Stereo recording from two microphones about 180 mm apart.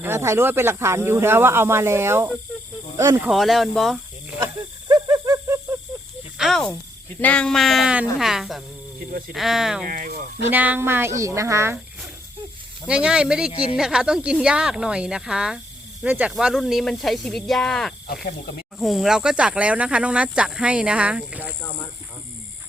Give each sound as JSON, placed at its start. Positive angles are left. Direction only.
{"t": 0.0, "sound": "speech", "side_deg": -15}
{"t": 3.2, "sound": "speech", "side_deg": 0}
{"t": 4.9, "sound": "owl", "side_deg": -20}
{"t": 6.3, "sound": "speech", "side_deg": 0}
{"t": 9.8, "sound": "speech", "side_deg": -50}
{"t": 10.5, "sound": "speech", "side_deg": -10}
{"t": 12.9, "sound": "speech", "side_deg": -5}
{"t": 18.1, "sound": "speech", "side_deg": 60}
{"t": 18.8, "sound": "speech", "side_deg": 0}